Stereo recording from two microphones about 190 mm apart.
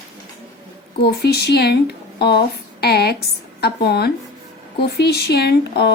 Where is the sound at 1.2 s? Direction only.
60° left (ahead or behind).